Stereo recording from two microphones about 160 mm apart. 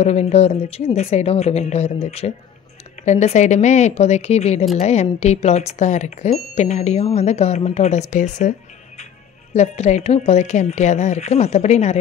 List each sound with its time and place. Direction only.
0.0 s a woman's voice: 45° left (ahead or behind)